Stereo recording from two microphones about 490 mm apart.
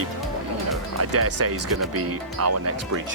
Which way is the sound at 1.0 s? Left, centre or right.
Right.